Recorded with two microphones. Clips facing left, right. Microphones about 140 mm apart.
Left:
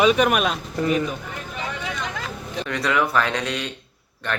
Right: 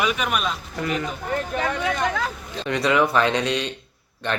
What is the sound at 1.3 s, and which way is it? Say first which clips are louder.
Speech: right 7 dB; 70° right (ahead or behind).